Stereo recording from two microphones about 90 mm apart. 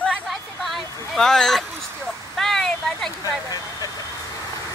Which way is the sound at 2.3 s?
5° left (ahead or behind).